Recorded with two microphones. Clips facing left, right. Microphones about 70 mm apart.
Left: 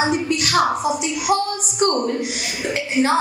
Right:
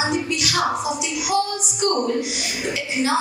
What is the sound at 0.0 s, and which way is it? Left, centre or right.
A woman's voice, left.